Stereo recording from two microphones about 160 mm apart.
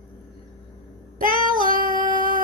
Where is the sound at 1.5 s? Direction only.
60° right (ahead or behind).